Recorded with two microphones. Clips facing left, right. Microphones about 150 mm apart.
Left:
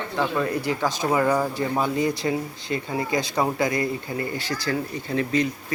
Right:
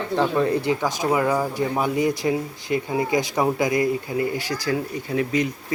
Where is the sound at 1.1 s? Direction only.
5° right (ahead or behind).